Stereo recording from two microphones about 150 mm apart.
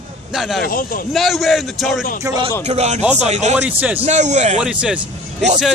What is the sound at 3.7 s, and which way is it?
Speech, 10° right (ahead or behind).